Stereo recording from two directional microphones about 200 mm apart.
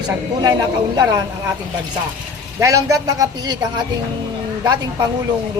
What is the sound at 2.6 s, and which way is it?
Speech, 15° right (ahead or behind).